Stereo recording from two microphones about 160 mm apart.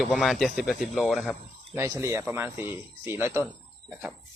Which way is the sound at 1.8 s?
15° right (ahead or behind).